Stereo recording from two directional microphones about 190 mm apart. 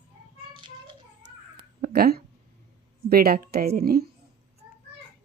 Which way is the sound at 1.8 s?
50° right (ahead or behind).